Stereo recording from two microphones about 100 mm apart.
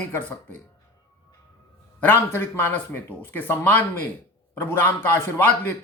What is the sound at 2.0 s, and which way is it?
Speech, 25° left (ahead or behind).